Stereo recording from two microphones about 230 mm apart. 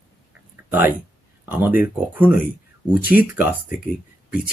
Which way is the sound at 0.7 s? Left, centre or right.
Centre.